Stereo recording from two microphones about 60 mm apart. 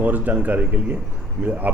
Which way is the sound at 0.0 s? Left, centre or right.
Right.